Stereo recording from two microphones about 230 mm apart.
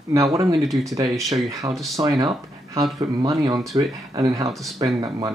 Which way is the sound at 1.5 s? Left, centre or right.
Centre.